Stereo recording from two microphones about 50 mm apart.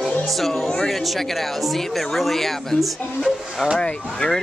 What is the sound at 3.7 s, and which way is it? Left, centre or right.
Speech, centre.